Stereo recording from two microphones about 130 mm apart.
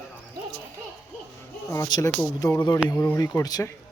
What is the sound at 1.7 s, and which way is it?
Speech, 25° left (ahead or behind).